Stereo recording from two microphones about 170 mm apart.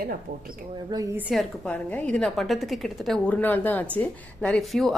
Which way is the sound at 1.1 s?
5° right (ahead or behind).